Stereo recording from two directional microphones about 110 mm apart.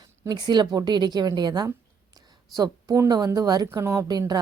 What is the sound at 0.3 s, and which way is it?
A woman's voice, 40° right (ahead or behind).